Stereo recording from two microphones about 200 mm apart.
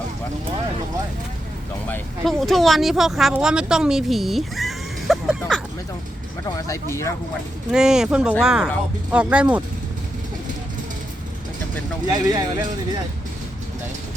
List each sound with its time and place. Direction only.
1.9 s speech: centre (ahead or behind)
6.6 s speech: 15° left (ahead or behind)
7.7 s speech: 5° right (ahead or behind)
12.1 s speech: 20° right (ahead or behind)